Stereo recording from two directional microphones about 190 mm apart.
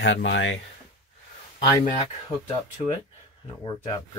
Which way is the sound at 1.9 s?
30° left (ahead or behind).